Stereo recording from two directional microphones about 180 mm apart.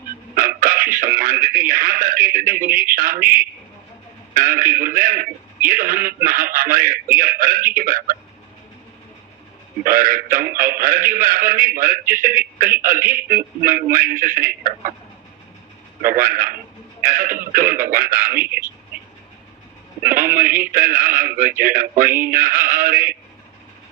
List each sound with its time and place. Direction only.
0.3 s a sound: 50° right (ahead or behind)
0.9 s a man's voice: 50° right (ahead or behind)
4.4 s a man's voice: 50° right (ahead or behind)
9.8 s a man's voice: 50° right (ahead or behind)
16.0 s a man's voice: 50° right (ahead or behind)
18.4 s speech: 10° right (ahead or behind)
20.1 s a man's voice: 50° right (ahead or behind)